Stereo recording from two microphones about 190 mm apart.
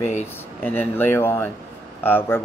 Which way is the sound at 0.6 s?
10° left (ahead or behind).